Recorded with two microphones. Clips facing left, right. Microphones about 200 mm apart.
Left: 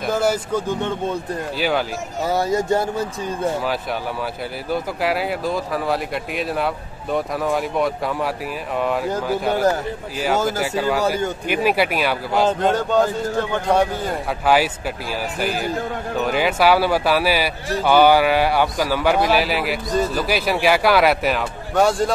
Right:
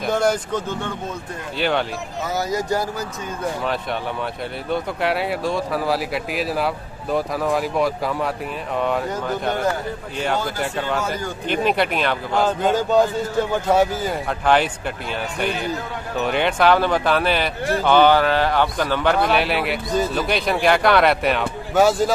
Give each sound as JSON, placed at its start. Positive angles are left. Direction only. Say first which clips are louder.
{"t": 0.0, "sound": "speech", "louder": "even", "side_deg": 5}
{"t": 2.2, "sound": "speech", "louder": "left 4 dB", "side_deg": 30}
{"t": 4.6, "sound": "speech", "louder": "even", "side_deg": 0}
{"t": 10.6, "sound": "speech", "louder": "left 3 dB", "side_deg": 5}
{"t": 11.0, "sound": "speech", "louder": "left 5 dB", "side_deg": 30}
{"t": 11.4, "sound": "speech", "louder": "right 1 dB", "side_deg": 10}